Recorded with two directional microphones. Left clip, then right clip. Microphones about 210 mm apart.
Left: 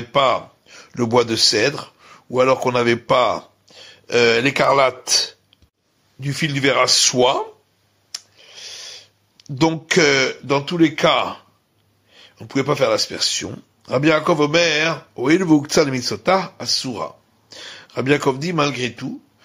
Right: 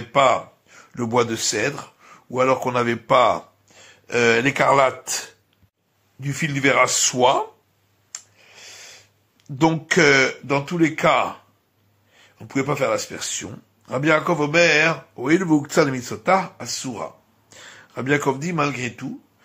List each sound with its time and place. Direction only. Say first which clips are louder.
0.1 s speech: even; 45° left (ahead or behind)
8.1 s a sound: left 6 dB; 40° left (ahead or behind)
12.1 s speech: left 3 dB; 40° left (ahead or behind)